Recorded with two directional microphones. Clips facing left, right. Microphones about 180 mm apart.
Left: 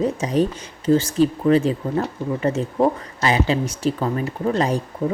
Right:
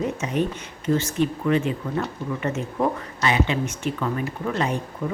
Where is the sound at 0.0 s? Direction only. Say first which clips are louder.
Left 5 dB; 35° left (ahead or behind).